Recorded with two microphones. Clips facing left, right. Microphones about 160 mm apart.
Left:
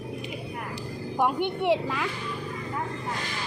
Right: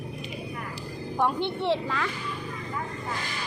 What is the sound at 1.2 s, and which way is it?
Speech, 15° left (ahead or behind).